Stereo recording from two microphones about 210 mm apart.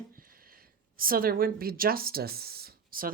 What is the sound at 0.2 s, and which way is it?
Speech, 45° right (ahead or behind).